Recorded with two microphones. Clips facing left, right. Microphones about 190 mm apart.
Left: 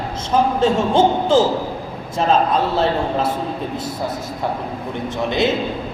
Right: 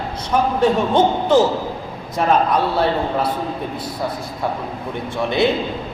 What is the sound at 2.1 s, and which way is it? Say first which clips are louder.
A man's voice: even; 25° left (ahead or behind).